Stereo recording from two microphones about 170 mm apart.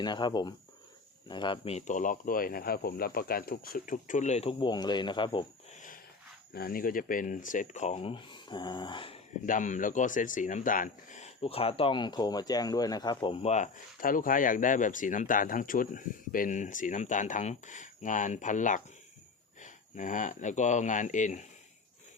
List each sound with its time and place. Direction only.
0.0 s speech: 25° left (ahead or behind)
6.5 s speech: 60° left (ahead or behind); by 9.2 s 30° left (ahead or behind)
9.5 s speech: 50° left (ahead or behind); by 13.5 s 30° left (ahead or behind)
13.5 s speech: 50° left (ahead or behind)